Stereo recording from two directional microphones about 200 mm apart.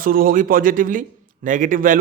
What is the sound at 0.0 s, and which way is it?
A man's voice, 45° right (ahead or behind).